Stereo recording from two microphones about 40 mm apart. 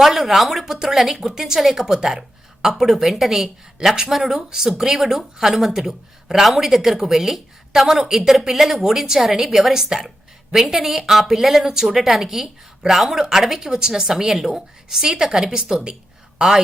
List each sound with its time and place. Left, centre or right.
0.0 s a woman's voice: centre
15.0 s a woman's voice: centre